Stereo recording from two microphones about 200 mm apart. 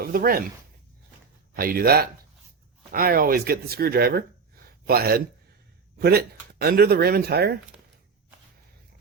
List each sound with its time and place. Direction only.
0.0 s speech: 45° right (ahead or behind)
1.5 s speech: 45° right (ahead or behind)
4.6 s a sound: 50° right (ahead or behind)
6.0 s speech: 50° right (ahead or behind)